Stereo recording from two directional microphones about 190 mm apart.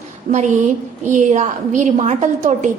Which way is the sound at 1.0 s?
40° right (ahead or behind).